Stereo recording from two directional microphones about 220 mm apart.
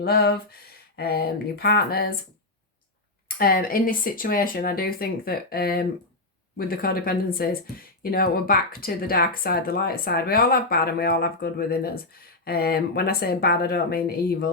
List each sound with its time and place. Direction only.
0.0 s speech: 45° left (ahead or behind)
3.2 s speech: 40° left (ahead or behind)